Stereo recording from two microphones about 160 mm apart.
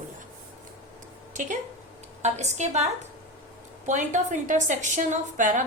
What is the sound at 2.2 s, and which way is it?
A woman's voice, 45° right (ahead or behind).